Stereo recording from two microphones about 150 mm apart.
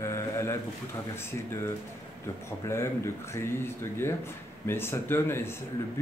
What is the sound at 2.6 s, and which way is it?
Speech, 15° left (ahead or behind).